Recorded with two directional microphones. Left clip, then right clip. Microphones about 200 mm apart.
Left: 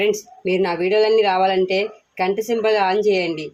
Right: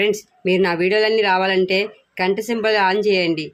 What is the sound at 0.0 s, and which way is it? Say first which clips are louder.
Speech: right 1 dB; 35° right (ahead or behind).